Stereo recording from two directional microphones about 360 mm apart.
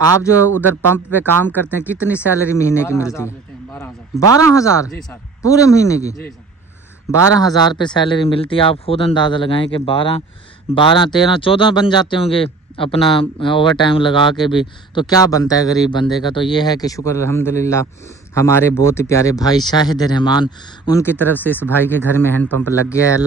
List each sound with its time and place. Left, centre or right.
0.0 s speech: centre
7.3 s speech: centre